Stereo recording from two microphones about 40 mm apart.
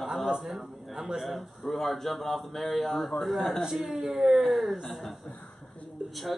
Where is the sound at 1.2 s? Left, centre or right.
Centre.